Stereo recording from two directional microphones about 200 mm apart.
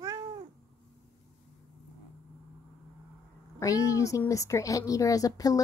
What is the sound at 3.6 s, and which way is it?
Speech, 15° left (ahead or behind).